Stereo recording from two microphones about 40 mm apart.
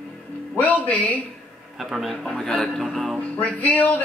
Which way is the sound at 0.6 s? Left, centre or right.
Left.